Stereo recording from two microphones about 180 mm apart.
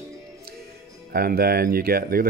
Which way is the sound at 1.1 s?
55° right (ahead or behind).